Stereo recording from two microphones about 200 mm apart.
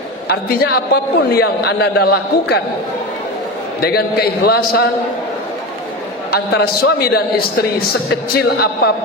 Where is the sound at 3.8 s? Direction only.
50° left (ahead or behind).